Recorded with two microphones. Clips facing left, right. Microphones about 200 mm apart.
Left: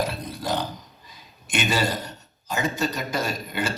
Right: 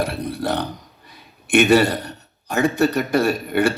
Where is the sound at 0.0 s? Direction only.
65° right (ahead or behind).